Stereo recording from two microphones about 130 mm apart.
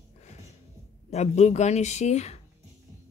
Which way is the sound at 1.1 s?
60° left (ahead or behind).